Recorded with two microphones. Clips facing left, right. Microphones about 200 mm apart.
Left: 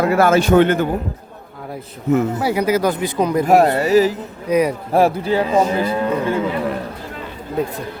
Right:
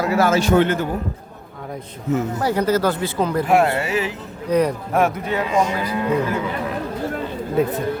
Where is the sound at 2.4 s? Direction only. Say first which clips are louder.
Left 1 dB; 10° left (ahead or behind).